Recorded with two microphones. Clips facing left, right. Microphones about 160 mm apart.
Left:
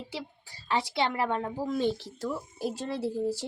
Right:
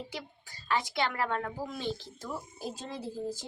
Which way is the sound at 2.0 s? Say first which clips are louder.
Left 6 dB; 75° left (ahead or behind).